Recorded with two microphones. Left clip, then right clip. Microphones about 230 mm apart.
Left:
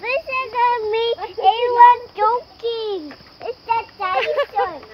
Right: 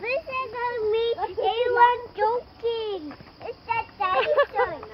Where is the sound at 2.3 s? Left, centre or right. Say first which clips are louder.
Left 6 dB; left.